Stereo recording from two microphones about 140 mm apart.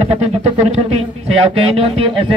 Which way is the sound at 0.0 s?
50° right (ahead or behind).